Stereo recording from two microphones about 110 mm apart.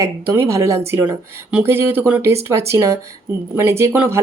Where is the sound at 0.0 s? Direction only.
25° right (ahead or behind).